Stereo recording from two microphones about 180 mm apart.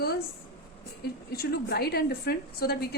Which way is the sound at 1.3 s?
60° left (ahead or behind).